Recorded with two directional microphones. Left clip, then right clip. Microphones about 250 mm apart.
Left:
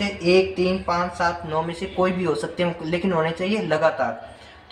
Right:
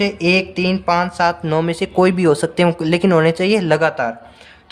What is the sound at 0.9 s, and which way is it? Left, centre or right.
Speech, right.